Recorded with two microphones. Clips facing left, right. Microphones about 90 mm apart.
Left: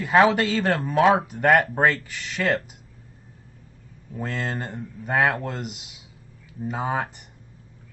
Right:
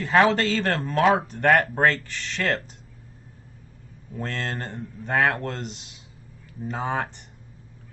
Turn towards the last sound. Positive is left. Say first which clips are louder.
# left 1 dB
turn(degrees=5)  # may be behind; listen again after turning